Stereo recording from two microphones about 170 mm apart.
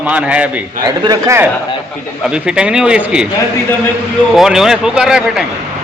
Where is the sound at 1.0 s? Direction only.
20° right (ahead or behind).